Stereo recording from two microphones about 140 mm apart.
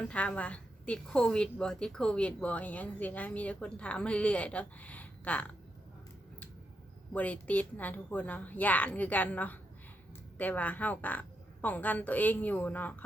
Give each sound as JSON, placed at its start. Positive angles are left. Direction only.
{"t": 0.1, "sound": "a woman's voice", "side_deg": 10}
{"t": 7.1, "sound": "a woman's voice", "side_deg": 10}